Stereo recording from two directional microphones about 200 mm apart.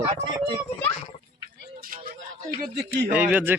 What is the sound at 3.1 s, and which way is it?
Speech, 10° right (ahead or behind).